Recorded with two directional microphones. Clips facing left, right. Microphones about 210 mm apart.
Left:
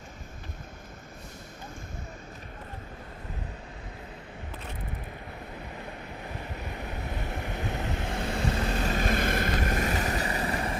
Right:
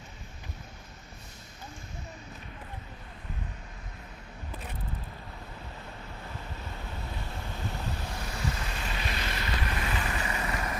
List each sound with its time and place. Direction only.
6.6 s waves: 15° left (ahead or behind)
8.3 s vehicle: 25° left (ahead or behind)
8.5 s vehicle: 45° left (ahead or behind)